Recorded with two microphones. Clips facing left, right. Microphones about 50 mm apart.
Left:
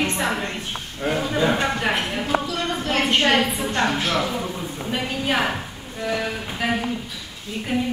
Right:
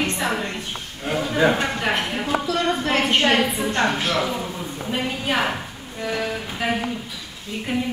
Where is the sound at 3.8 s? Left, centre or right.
Centre.